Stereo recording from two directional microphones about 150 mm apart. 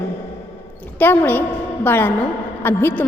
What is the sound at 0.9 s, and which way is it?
A woman's voice, 15° left (ahead or behind).